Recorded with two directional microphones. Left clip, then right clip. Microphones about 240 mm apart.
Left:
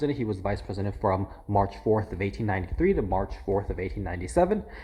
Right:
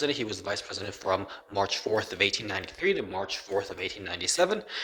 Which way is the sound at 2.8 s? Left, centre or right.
Right.